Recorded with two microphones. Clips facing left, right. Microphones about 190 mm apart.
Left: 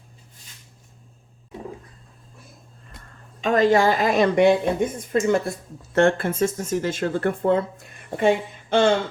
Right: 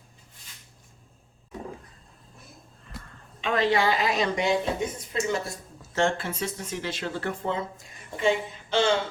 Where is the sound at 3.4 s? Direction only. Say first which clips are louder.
Left 6 dB; 45° left (ahead or behind).